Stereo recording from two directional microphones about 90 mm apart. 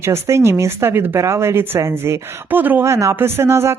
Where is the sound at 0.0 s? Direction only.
30° right (ahead or behind).